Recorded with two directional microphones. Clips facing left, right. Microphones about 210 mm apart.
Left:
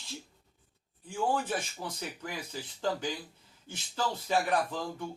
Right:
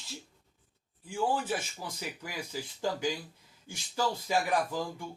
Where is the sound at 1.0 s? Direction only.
10° right (ahead or behind).